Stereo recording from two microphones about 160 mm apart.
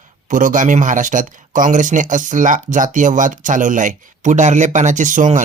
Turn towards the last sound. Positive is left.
turn(degrees=-55)  # may be behind; listen again after turning